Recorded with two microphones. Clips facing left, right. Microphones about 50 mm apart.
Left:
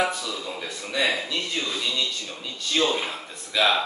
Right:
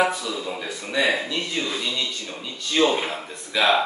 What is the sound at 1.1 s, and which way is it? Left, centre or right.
Speech, centre.